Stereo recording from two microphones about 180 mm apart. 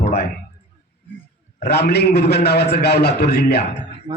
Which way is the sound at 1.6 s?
65° left (ahead or behind).